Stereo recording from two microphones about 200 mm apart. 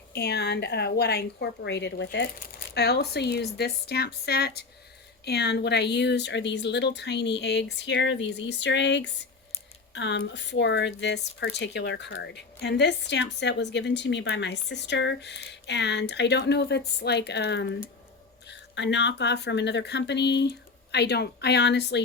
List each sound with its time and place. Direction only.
0.1 s a woman's voice: 55° left (ahead or behind)